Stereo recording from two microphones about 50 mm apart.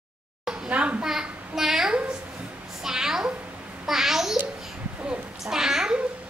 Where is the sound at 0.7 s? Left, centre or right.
Right.